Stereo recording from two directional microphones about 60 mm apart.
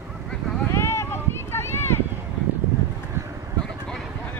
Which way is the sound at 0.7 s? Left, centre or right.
Left.